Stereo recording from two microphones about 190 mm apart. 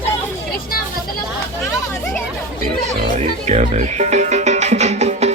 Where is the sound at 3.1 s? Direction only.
35° right (ahead or behind).